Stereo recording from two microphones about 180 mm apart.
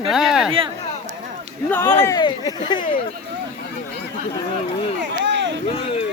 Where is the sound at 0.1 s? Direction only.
5° right (ahead or behind).